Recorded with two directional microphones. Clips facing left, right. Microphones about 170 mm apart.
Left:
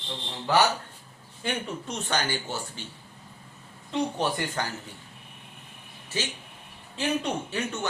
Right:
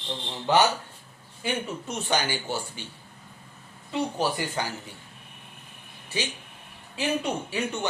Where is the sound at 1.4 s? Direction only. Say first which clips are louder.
Right 1 dB; 10° right (ahead or behind).